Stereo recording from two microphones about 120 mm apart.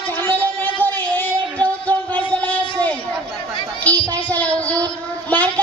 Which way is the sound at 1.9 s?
10° left (ahead or behind).